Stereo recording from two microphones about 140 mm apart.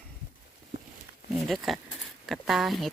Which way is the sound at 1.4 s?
Centre (ahead or behind).